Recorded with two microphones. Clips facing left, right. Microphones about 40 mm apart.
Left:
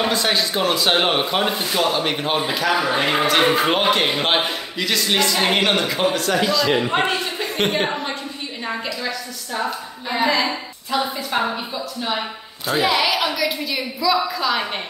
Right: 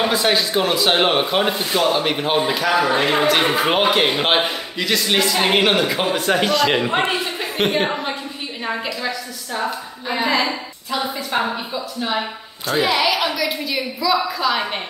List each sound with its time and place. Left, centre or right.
0.0 s speech: centre
6.4 s a man's voice: right
6.9 s speech: centre